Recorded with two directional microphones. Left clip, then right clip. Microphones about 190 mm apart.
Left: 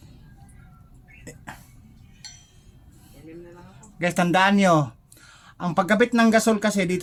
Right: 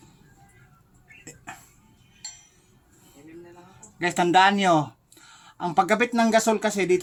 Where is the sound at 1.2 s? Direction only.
20° left (ahead or behind).